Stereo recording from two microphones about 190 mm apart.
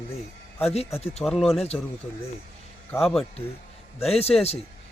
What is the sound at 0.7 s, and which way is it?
Speech, 30° left (ahead or behind).